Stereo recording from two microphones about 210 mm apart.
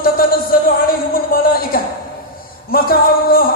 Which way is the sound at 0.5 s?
45° left (ahead or behind).